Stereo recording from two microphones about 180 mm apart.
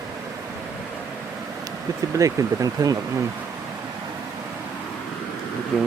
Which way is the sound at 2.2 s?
20° right (ahead or behind).